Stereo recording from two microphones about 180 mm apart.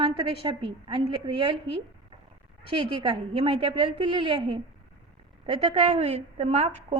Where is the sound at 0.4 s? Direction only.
30° right (ahead or behind).